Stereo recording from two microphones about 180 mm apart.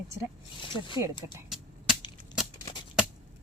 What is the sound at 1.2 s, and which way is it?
Speech, 15° right (ahead or behind).